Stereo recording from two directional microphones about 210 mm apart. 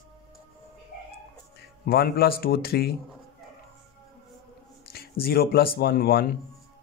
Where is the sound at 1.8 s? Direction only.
45° left (ahead or behind).